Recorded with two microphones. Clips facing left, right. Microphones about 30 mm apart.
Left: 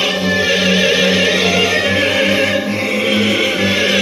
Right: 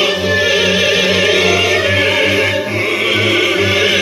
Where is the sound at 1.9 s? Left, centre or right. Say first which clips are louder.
Right 1 dB; right.